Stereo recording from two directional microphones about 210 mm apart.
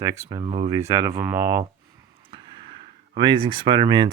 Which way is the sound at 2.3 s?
25° right (ahead or behind).